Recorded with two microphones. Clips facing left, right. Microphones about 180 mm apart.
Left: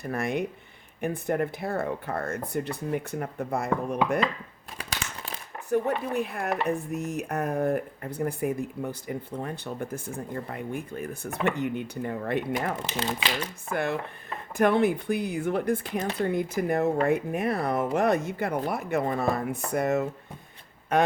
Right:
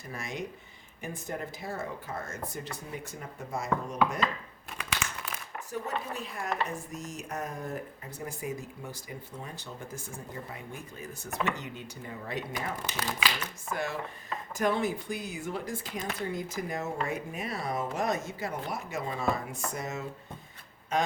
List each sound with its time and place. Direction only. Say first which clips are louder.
0.0 s speech: left 9 dB; 60° left (ahead or behind)
4.8 s crumpling: even; 35° left (ahead or behind)
5.7 s speech: left 10 dB; 60° left (ahead or behind)
12.8 s speech: left 3 dB; 25° left (ahead or behind)
13.7 s speech: left 5 dB; 60° left (ahead or behind)